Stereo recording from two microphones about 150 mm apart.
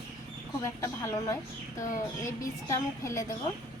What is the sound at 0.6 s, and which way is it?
A woman's voice, 20° left (ahead or behind).